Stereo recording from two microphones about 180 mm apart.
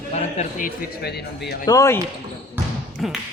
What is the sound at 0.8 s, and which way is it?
Speech, 65° left (ahead or behind).